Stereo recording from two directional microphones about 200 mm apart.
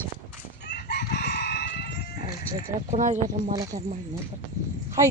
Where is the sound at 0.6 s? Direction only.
55° left (ahead or behind).